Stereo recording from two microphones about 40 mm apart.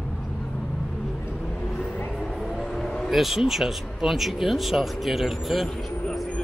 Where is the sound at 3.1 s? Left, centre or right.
Centre.